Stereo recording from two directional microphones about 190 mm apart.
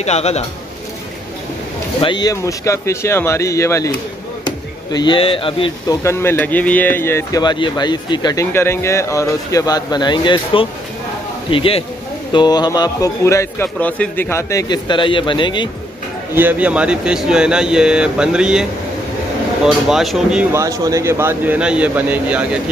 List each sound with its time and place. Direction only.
0.0 s speech: 35° left (ahead or behind)
2.0 s speech: 25° left (ahead or behind)
6.0 s a man's voice: 10° left (ahead or behind)
16.3 s speech: 10° right (ahead or behind)
20.5 s a man's voice: 15° right (ahead or behind)